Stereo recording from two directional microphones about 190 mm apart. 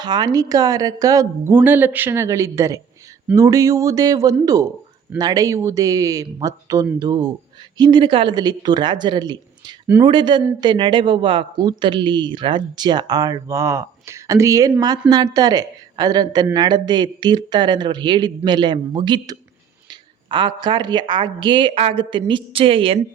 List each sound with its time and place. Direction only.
0.0 s a woman's voice: 20° right (ahead or behind)